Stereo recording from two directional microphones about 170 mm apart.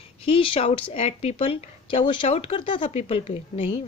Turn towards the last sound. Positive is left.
turn(degrees=35)  # may be behind; listen again after turning